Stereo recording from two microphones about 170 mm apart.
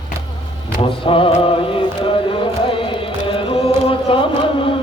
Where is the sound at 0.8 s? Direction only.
30° left (ahead or behind).